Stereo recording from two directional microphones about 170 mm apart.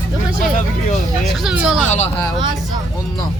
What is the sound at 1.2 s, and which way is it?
Speech, centre (ahead or behind).